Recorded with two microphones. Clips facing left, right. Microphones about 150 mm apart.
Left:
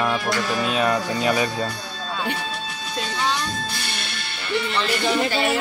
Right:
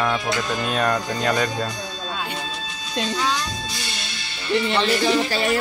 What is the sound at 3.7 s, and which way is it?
Music, 55° left (ahead or behind).